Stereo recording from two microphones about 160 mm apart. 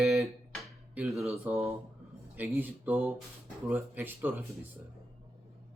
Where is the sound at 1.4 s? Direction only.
15° right (ahead or behind).